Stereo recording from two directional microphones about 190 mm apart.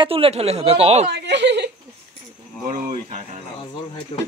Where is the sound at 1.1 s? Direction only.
65° right (ahead or behind).